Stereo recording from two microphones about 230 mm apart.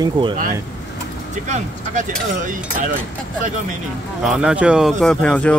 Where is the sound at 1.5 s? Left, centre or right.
Right.